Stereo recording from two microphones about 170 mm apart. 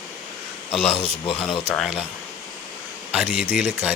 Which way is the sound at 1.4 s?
5° left (ahead or behind).